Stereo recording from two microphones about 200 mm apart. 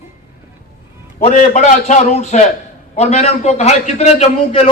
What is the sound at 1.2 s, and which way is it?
A man's voice, 35° left (ahead or behind).